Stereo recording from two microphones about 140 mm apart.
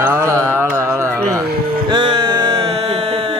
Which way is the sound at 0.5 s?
20° right (ahead or behind).